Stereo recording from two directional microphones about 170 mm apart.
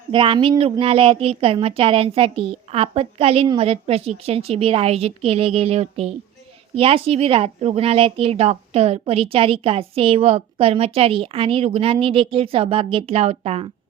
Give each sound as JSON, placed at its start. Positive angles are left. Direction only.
{"t": 0.1, "sound": "speech", "side_deg": -30}